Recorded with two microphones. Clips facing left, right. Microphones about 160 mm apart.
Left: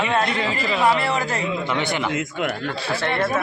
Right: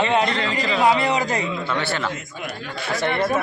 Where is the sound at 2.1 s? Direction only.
70° left (ahead or behind).